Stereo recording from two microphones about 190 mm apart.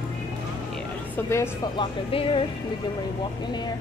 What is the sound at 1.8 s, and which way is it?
Speech, 30° left (ahead or behind).